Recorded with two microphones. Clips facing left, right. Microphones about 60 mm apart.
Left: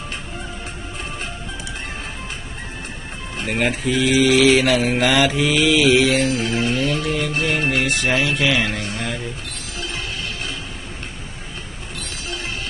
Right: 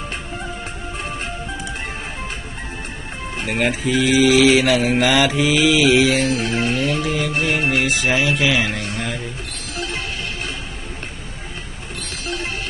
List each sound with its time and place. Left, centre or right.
3.4 s mantra: centre
6.6 s music: right
6.8 s mantra: centre
9.0 s a sound: centre